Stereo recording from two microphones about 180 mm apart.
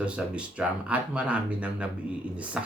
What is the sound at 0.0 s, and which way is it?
Speech, 5° right (ahead or behind).